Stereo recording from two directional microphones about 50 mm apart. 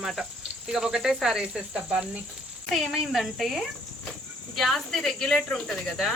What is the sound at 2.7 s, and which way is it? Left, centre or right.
Speech, centre.